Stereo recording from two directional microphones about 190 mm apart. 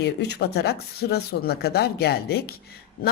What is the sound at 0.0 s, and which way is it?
A woman's voice, 60° left (ahead or behind).